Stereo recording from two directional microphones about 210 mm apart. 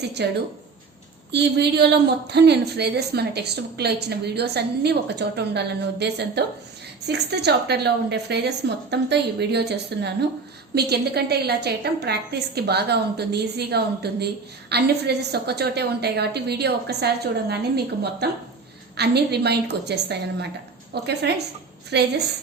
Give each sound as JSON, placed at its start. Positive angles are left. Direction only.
{"t": 0.2, "sound": "a woman's voice", "side_deg": -50}